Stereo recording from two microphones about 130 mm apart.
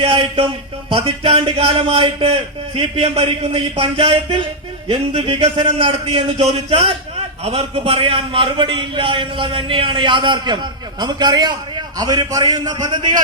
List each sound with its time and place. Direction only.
0.0 s a man's voice: 45° right (ahead or behind)